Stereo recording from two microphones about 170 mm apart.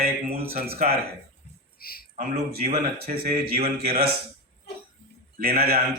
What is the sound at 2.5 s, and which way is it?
Speech, 65° right (ahead or behind).